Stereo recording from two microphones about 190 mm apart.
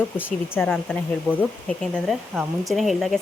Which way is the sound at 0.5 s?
10° left (ahead or behind).